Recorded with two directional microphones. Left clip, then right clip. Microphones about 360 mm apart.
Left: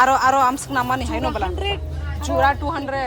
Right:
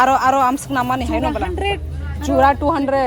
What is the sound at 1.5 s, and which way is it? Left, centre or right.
Speech, centre.